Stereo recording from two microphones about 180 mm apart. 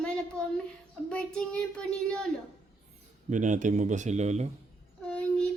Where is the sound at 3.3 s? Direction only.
45° right (ahead or behind).